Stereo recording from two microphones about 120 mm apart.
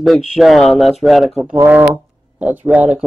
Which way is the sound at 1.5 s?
15° right (ahead or behind).